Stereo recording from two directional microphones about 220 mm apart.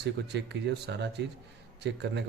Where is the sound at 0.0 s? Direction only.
50° right (ahead or behind).